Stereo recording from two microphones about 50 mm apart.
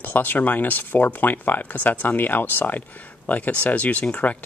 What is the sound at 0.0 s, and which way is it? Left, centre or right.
Speech, left.